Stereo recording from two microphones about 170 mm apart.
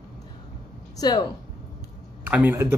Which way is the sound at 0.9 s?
20° left (ahead or behind).